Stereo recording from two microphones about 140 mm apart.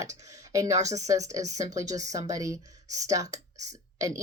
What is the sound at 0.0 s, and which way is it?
Speech, 25° right (ahead or behind).